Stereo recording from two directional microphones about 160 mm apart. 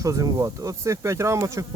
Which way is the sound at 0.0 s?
20° right (ahead or behind).